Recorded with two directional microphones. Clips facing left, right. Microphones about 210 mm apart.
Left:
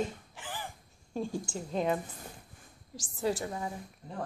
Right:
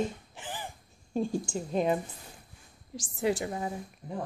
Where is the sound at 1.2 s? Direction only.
15° right (ahead or behind).